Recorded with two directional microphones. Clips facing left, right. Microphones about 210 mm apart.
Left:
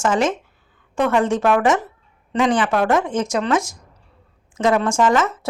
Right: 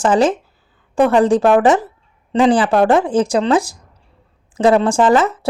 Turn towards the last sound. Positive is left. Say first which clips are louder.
# right 4 dB
turn(degrees=-35)  # may be behind; listen again after turning